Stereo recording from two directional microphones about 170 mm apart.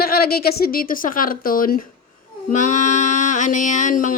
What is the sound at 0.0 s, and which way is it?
A woman's voice, 65° left (ahead or behind).